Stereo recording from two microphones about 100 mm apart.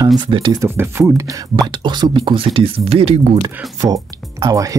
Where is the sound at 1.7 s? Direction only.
50° right (ahead or behind); by 3.2 s 80° right.